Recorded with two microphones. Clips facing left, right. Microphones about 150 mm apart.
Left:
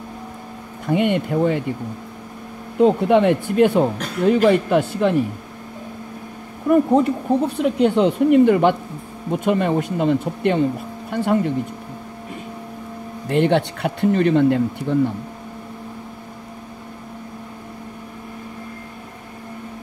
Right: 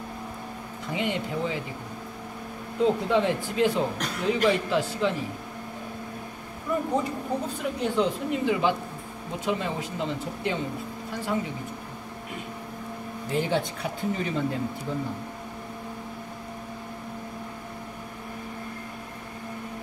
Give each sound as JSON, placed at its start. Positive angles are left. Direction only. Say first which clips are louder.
{"t": 0.8, "sound": "speech", "louder": "left 10 dB", "side_deg": 60}
{"t": 2.8, "sound": "speech", "louder": "left 8 dB", "side_deg": 65}
{"t": 6.7, "sound": "speech", "louder": "left 11 dB", "side_deg": 65}
{"t": 13.3, "sound": "speech", "louder": "left 9 dB", "side_deg": 70}